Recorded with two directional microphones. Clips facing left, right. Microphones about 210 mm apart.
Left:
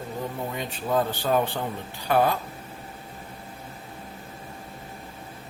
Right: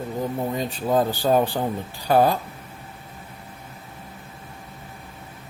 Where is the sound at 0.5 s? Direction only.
35° right (ahead or behind).